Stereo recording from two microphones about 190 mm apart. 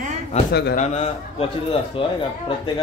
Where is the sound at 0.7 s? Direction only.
40° left (ahead or behind).